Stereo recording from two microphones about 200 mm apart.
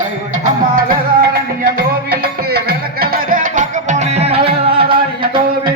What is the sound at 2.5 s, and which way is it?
Music, 50° right (ahead or behind).